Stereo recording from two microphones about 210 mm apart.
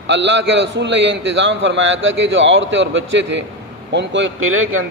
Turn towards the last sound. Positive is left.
turn(degrees=-75)  # may be behind; listen again after turning